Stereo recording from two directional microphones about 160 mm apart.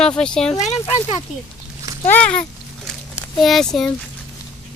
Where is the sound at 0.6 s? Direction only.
45° left (ahead or behind).